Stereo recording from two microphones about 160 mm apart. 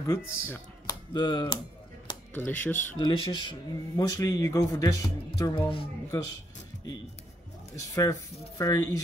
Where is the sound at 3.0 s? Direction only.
30° left (ahead or behind).